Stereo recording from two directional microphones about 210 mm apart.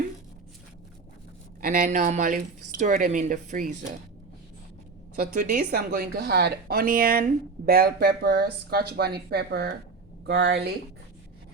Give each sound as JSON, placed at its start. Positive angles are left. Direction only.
{"t": 1.6, "sound": "speech", "side_deg": -40}
{"t": 5.2, "sound": "speech", "side_deg": -50}